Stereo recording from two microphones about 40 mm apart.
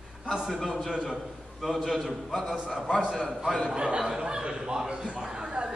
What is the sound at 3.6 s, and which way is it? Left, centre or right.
Chuckle, right.